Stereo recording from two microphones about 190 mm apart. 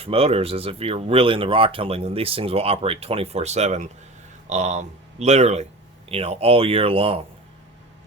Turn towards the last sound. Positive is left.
turn(degrees=-30)  # may be behind; listen again after turning